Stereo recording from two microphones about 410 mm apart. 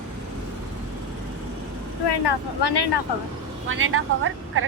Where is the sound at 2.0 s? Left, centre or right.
Left.